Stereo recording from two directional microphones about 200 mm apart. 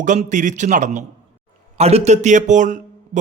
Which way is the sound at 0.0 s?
40° right (ahead or behind).